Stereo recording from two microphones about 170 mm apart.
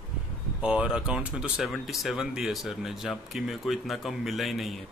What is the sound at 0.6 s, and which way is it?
Speech, 5° right (ahead or behind).